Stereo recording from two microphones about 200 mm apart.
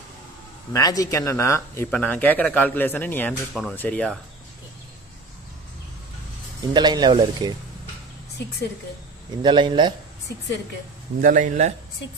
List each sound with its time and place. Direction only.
0.7 s speech: 15° left (ahead or behind)
6.7 s speech: 20° right (ahead or behind)
9.4 s speech: 25° right (ahead or behind)
11.1 s a man's voice: 40° right (ahead or behind)